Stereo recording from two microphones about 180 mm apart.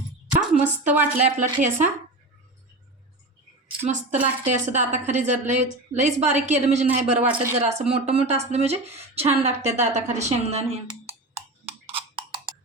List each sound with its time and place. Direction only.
0.6 s speech: 10° right (ahead or behind)
1.1 s speech: 45° right (ahead or behind)
3.8 s a woman's voice: 40° right (ahead or behind)
7.3 s speech: 10° right (ahead or behind)
7.7 s a woman's voice: 40° right (ahead or behind)
10.8 s cowbell: 35° right (ahead or behind)